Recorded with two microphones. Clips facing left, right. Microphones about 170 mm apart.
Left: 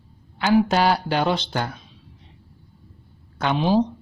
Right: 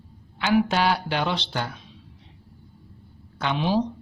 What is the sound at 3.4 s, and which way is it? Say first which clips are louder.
Speech: left 4 dB; 45° left (ahead or behind).